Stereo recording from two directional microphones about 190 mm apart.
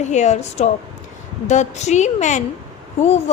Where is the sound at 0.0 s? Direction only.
40° left (ahead or behind).